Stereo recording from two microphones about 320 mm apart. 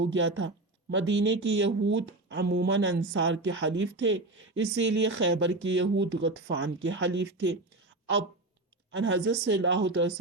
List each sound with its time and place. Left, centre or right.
0.0 s speech: right
8.9 s speech: right